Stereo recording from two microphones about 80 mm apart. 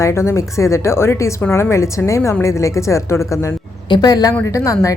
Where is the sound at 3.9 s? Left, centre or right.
Left.